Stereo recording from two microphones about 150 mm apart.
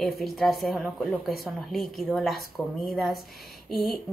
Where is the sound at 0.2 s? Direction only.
Centre (ahead or behind).